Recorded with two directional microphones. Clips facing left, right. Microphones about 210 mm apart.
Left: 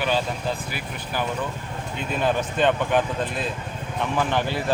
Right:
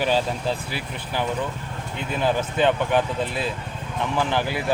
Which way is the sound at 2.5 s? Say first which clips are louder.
Right 1 dB; 5° right (ahead or behind).